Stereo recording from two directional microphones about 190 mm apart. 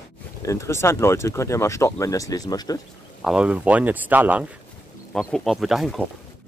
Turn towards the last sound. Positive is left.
turn(degrees=0)  # may be behind; listen again after turning